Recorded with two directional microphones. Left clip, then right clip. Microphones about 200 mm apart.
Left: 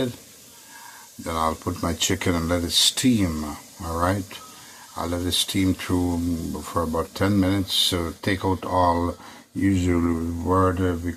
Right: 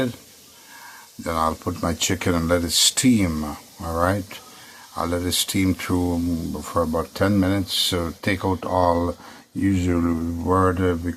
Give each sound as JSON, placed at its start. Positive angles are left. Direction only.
{"t": 1.2, "sound": "speech", "side_deg": -20}